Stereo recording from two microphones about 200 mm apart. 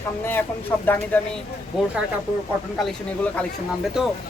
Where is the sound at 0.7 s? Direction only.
10° left (ahead or behind).